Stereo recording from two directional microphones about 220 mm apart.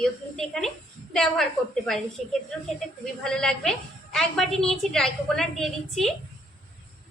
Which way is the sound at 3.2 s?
5° left (ahead or behind).